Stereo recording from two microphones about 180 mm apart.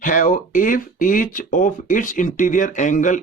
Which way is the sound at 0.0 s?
45° left (ahead or behind).